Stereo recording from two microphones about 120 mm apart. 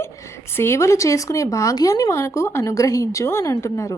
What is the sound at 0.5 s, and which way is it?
Speech, 20° left (ahead or behind).